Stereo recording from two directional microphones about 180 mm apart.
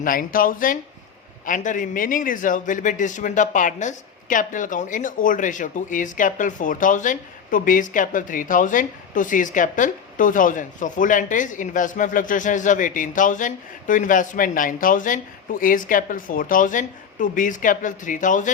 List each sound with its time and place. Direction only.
0.0 s a man's voice: 50° left (ahead or behind)